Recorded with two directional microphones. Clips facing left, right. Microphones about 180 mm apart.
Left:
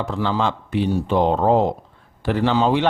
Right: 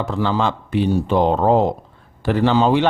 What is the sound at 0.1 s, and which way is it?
Speech, 45° right (ahead or behind).